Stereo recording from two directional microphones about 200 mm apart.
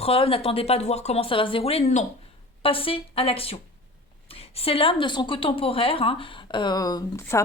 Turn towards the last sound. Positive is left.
turn(degrees=15)  # may be behind; listen again after turning